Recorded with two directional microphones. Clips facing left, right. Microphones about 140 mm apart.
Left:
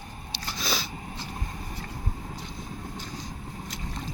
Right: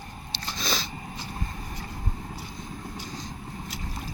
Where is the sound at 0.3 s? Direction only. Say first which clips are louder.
Even; 10° left (ahead or behind).